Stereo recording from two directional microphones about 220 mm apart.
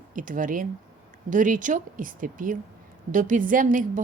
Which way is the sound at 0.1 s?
35° right (ahead or behind).